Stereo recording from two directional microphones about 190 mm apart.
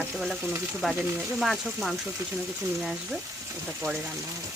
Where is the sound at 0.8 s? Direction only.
Centre (ahead or behind).